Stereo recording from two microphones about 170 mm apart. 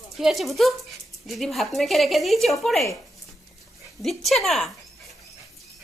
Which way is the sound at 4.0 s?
Centre (ahead or behind).